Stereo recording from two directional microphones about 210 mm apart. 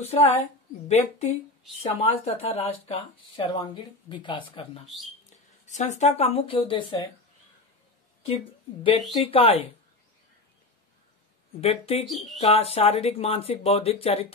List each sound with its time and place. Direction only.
0.0 s speech: 30° left (ahead or behind)
4.8 s speech: centre (ahead or behind)
5.7 s speech: 35° left (ahead or behind)
9.1 s speech: 25° left (ahead or behind)
11.6 s speech: 30° left (ahead or behind)